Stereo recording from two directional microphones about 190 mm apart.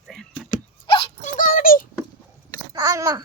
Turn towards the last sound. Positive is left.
turn(degrees=-20)  # may be behind; listen again after turning